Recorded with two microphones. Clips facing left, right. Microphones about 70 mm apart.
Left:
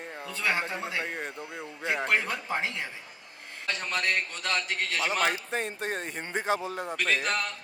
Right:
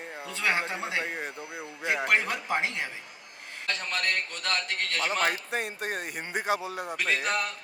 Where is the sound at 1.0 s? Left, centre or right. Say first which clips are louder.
Even; centre.